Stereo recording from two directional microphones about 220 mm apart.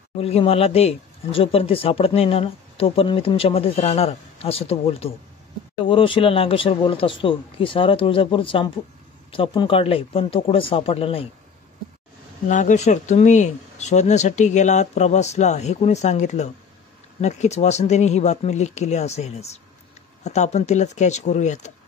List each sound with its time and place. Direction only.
0.2 s speech: 25° left (ahead or behind)
12.4 s speech: 35° left (ahead or behind)